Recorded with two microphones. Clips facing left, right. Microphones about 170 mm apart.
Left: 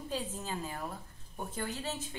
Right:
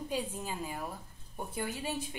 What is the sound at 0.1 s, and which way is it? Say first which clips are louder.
A woman's voice: even; 15° right (ahead or behind).